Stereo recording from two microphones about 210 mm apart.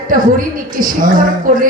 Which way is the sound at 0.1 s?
40° right (ahead or behind).